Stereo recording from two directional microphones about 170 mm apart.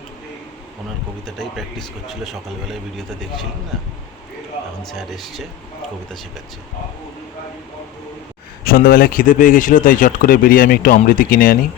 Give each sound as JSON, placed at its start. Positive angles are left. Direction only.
{"t": 2.0, "sound": "speech", "side_deg": 0}
{"t": 4.9, "sound": "speech", "side_deg": 0}
{"t": 8.6, "sound": "speech", "side_deg": 60}